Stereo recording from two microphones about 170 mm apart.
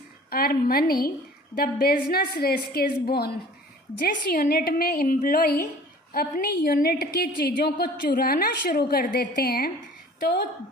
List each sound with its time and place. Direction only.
0.3 s a woman's voice: 60° left (ahead or behind)